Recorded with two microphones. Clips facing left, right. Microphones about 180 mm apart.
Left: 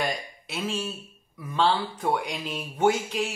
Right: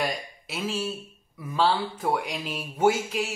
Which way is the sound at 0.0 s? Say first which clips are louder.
Even; centre (ahead or behind).